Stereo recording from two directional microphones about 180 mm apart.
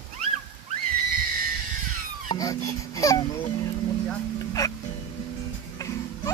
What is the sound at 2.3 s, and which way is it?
Music, 20° left (ahead or behind).